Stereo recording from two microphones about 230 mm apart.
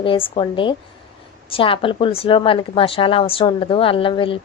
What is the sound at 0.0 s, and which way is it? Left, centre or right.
Speech, left.